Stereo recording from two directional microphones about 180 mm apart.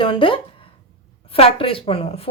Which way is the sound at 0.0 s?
30° left (ahead or behind).